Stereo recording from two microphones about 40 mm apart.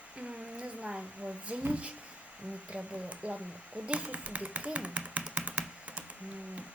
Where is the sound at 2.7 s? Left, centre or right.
Right.